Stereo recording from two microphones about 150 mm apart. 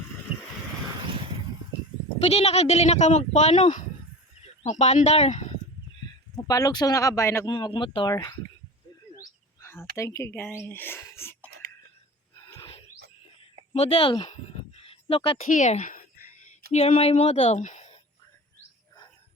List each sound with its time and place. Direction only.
0.9 s a sound: 35° right (ahead or behind)
2.2 s speech: 45° left (ahead or behind)
6.3 s speech: 25° left (ahead or behind)
7.4 s speech: 30° left (ahead or behind)
9.2 s bird: 15° left (ahead or behind)
10.0 s speech: 20° left (ahead or behind)
13.7 s speech: 40° left (ahead or behind)
14.8 s a sound: 35° left (ahead or behind)
15.4 s a sound: 55° left (ahead or behind)
16.7 s speech: 45° left (ahead or behind)